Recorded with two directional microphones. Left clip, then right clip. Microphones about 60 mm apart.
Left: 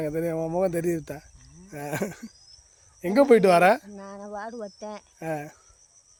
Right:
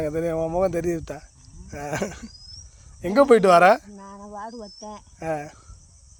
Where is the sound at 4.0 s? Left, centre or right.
Left.